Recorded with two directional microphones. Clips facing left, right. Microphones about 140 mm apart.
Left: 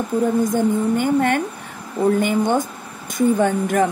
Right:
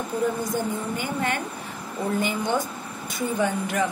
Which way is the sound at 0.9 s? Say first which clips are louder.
Left 9 dB; 50° left (ahead or behind).